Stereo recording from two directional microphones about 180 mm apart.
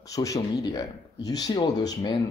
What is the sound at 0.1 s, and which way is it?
Speech, 20° left (ahead or behind).